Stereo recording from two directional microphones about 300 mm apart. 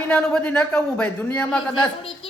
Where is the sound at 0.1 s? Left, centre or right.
Centre.